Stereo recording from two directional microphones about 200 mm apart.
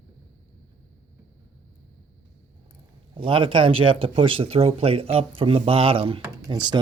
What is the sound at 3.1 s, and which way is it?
Speech, 25° right (ahead or behind).